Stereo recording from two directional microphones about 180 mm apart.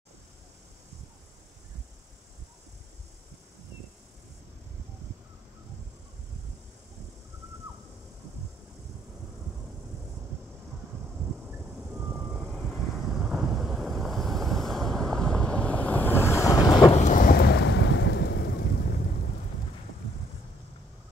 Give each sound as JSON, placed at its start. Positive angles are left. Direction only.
{"t": 11.9, "sound": "vehicle", "side_deg": -5}
{"t": 16.9, "sound": "thunder", "side_deg": 45}